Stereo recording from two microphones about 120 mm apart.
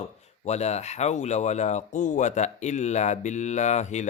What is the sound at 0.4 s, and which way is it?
Speech, 65° left (ahead or behind).